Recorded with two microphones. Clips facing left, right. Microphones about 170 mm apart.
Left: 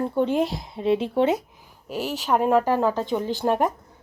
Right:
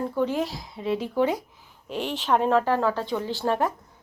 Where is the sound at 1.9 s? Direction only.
5° left (ahead or behind).